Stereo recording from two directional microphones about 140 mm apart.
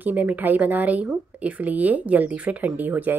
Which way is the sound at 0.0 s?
10° right (ahead or behind).